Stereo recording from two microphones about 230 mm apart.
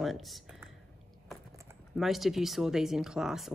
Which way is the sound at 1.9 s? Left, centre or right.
Centre.